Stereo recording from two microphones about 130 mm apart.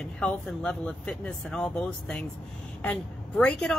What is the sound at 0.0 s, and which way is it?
A woman's voice, 10° left (ahead or behind).